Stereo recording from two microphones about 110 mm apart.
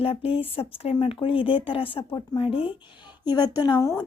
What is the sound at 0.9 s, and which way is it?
Speech, 55° left (ahead or behind).